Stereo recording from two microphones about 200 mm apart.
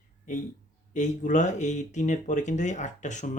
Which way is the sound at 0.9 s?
40° left (ahead or behind).